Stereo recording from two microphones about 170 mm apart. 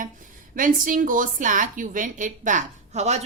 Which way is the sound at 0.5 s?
50° right (ahead or behind).